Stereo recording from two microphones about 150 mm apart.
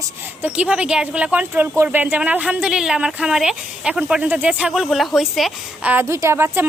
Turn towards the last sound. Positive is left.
turn(degrees=-15)  # may be behind; listen again after turning